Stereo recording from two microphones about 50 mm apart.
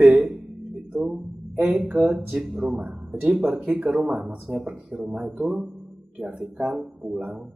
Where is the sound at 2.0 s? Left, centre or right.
Centre.